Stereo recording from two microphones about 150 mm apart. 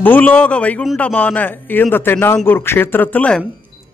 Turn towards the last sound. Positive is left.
turn(degrees=10)  # may be behind; listen again after turning